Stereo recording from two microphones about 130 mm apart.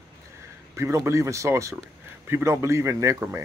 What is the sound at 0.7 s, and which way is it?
Speech, 20° right (ahead or behind).